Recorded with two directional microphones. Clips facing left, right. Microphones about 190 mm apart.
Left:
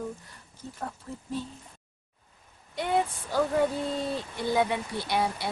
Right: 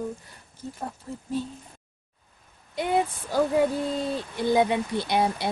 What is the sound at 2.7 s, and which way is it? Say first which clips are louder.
Speech: right 2 dB; 15° right (ahead or behind).